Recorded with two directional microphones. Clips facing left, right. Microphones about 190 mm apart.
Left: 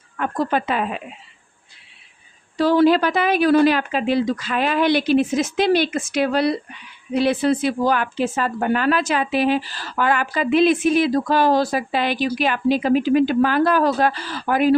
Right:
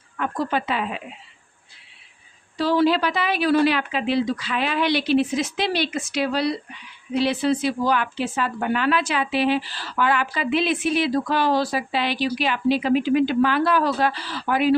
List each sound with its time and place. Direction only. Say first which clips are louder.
0.2 s speech: left 3 dB; 45° left (ahead or behind)
2.6 s speech: left 4 dB; 50° left (ahead or behind)